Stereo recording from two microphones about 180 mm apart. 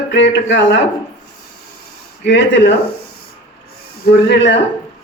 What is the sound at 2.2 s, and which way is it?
Speech, 85° left.